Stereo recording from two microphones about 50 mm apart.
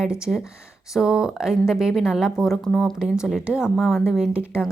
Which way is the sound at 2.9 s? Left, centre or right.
Centre.